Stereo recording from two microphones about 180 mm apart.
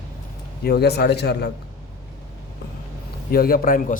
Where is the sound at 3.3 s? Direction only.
55° left (ahead or behind).